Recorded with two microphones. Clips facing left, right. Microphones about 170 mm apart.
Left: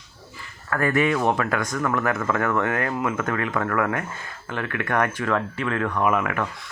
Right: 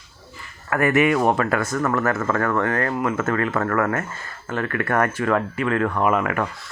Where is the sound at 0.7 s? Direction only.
15° right (ahead or behind).